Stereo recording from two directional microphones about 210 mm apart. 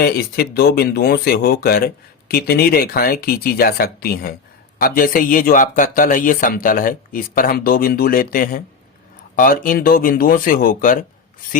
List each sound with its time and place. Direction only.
0.0 s speech: 45° left (ahead or behind)